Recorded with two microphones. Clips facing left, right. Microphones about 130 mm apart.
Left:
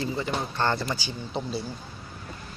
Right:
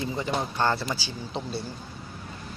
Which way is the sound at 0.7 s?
5° right (ahead or behind).